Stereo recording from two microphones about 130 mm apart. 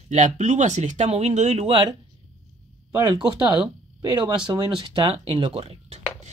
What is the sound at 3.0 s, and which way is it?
Speech, 35° right (ahead or behind).